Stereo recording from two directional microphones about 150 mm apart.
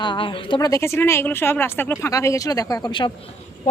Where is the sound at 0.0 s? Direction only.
30° left (ahead or behind).